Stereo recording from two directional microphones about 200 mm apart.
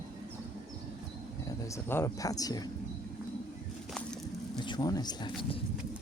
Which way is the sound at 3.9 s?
5° left (ahead or behind).